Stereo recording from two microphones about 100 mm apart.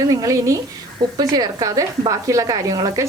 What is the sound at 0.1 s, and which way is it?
A woman's voice, 35° right (ahead or behind).